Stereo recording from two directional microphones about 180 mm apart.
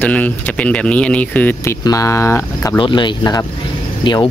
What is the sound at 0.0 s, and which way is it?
Speech, 10° left (ahead or behind).